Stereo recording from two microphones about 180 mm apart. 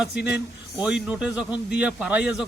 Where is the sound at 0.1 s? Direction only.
70° left (ahead or behind).